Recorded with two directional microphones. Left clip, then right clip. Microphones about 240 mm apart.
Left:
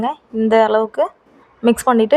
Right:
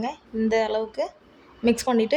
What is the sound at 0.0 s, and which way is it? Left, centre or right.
A woman's voice, centre.